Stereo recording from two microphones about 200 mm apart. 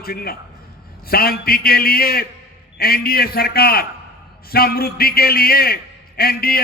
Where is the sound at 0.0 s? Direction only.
50° left (ahead or behind).